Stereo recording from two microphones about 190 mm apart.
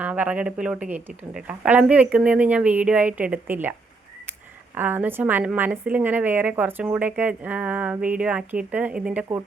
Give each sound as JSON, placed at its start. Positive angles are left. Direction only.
{"t": 0.0, "sound": "a woman's voice", "side_deg": -5}